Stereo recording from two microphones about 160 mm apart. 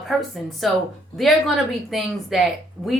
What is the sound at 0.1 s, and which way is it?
A woman's voice, centre (ahead or behind).